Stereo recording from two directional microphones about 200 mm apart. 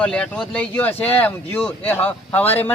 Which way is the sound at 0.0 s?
5° left (ahead or behind).